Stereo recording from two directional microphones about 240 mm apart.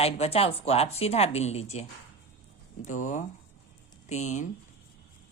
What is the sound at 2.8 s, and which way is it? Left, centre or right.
Speech, left.